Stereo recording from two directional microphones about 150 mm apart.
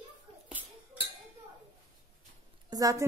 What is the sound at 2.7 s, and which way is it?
Speech, 20° right (ahead or behind).